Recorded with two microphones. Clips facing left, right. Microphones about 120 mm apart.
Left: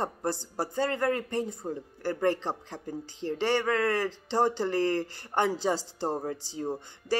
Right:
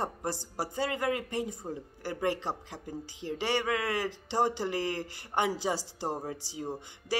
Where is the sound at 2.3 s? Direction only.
15° right (ahead or behind).